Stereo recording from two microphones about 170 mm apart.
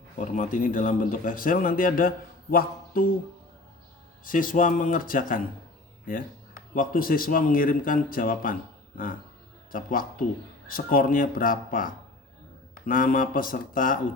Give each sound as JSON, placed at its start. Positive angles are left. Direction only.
{"t": 0.2, "sound": "speech", "side_deg": 50}
{"t": 4.2, "sound": "speech", "side_deg": 50}
{"t": 6.7, "sound": "a man's voice", "side_deg": 55}
{"t": 9.7, "sound": "a man's voice", "side_deg": 55}